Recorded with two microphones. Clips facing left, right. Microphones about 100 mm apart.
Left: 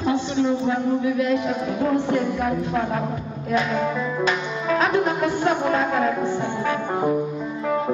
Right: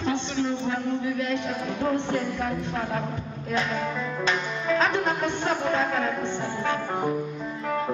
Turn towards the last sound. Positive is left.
turn(degrees=5)  # may be behind; listen again after turning